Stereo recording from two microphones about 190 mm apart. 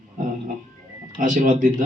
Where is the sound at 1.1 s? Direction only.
45° right (ahead or behind).